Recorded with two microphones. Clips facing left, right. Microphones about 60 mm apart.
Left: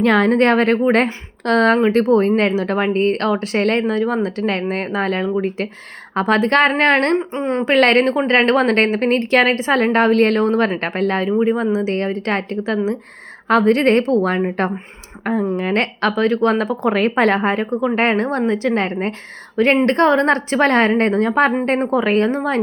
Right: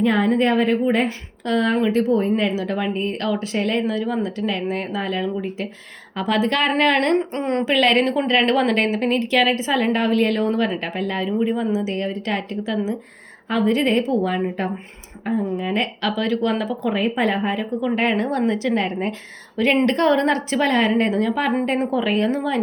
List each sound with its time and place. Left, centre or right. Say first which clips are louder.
0.0 s a woman's voice: left 4 dB; left
7.2 s a woman's voice: left 2 dB; centre
7.6 s speech: left 5 dB; left
11.3 s a woman's voice: left 4 dB; left
15.2 s speech: left 4 dB; left
16.6 s a woman's voice: left 4 dB; left
17.6 s speech: left 4 dB; left